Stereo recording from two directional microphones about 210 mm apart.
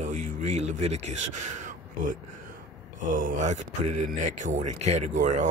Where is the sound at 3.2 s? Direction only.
40° right (ahead or behind).